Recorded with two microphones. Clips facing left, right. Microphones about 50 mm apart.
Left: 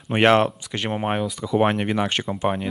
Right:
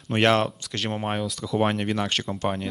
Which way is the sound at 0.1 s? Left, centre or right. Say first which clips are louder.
Left 4 dB; centre.